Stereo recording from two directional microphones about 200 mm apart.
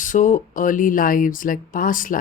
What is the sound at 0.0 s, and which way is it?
Speech, 40° left (ahead or behind).